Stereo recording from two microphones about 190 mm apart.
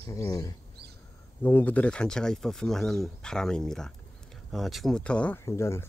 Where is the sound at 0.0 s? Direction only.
15° left (ahead or behind).